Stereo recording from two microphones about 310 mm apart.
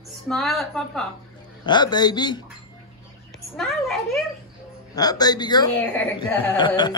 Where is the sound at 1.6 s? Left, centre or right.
Centre.